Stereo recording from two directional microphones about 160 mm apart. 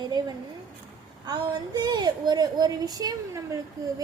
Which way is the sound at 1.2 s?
25° right (ahead or behind).